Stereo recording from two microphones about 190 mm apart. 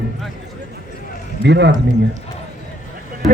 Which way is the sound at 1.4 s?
65° right (ahead or behind).